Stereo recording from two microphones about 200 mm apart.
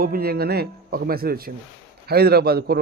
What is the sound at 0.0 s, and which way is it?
A man's voice, 50° right (ahead or behind).